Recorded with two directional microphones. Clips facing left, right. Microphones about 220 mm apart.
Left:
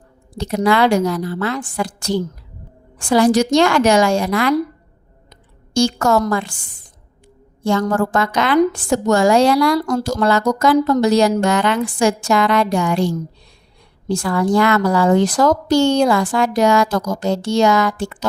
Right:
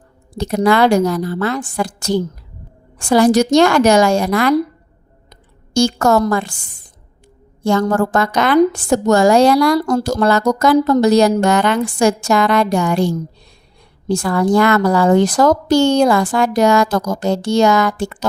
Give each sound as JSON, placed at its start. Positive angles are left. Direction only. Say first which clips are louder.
{"t": 0.3, "sound": "speech", "louder": "right 2 dB", "side_deg": -45}
{"t": 5.7, "sound": "speech", "louder": "right 2 dB", "side_deg": -40}
{"t": 7.6, "sound": "speech", "louder": "right 2 dB", "side_deg": -45}
{"t": 14.1, "sound": "speech", "louder": "right 2 dB", "side_deg": -45}